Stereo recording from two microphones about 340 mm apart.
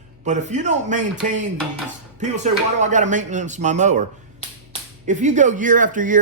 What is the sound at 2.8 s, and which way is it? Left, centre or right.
A man's voice, right.